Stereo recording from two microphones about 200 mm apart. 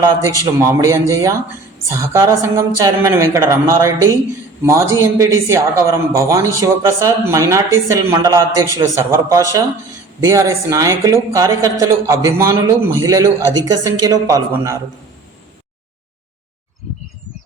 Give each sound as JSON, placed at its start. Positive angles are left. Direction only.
{"t": 0.0, "sound": "speech", "side_deg": -15}